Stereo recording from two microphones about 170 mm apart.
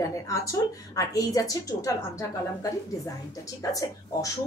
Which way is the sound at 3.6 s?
20° left (ahead or behind).